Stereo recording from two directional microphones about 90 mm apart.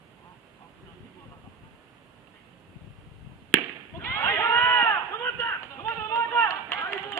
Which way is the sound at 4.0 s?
30° left (ahead or behind).